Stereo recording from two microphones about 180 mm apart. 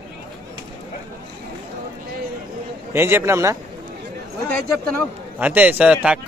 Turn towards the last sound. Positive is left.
turn(degrees=-5)  # may be behind; listen again after turning